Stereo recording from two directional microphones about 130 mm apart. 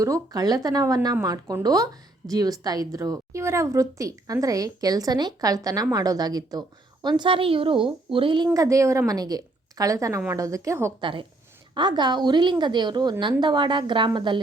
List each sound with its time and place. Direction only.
0.0 s a woman's voice: 25° right (ahead or behind)
8.5 s a woman's voice: 25° right (ahead or behind)
11.0 s a woman's voice: 40° right (ahead or behind)